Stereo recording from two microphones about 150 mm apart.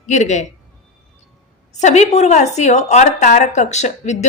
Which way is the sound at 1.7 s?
50° left (ahead or behind).